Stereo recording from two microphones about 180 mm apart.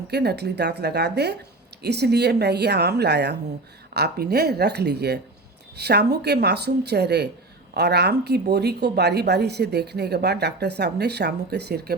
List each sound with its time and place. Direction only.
0.1 s speech: 65° right (ahead or behind)